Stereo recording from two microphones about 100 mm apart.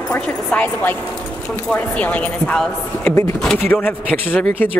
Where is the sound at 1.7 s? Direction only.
15° left (ahead or behind).